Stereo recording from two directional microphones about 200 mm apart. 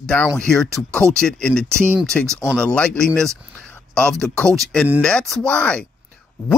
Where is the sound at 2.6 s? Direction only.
5° left (ahead or behind).